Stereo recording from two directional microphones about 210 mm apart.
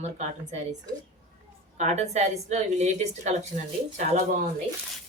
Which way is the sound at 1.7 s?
30° right (ahead or behind).